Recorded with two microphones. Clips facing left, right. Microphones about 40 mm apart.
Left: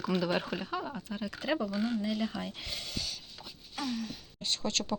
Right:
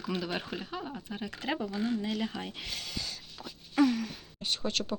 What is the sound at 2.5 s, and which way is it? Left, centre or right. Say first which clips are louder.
Speech: right 1 dB; right.